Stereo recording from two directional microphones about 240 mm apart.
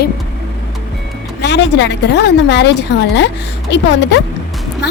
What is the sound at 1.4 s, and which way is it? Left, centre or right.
A woman's voice, left.